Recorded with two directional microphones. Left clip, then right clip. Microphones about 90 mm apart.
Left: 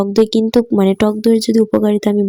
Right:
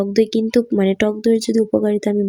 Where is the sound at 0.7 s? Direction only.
45° left (ahead or behind).